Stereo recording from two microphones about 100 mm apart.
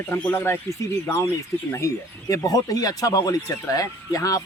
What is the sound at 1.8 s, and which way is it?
Speech, 35° left (ahead or behind).